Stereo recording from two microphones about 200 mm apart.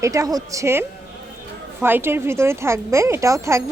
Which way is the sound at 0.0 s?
15° right (ahead or behind).